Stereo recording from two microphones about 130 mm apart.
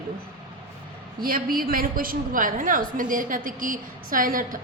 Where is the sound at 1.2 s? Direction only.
90° right.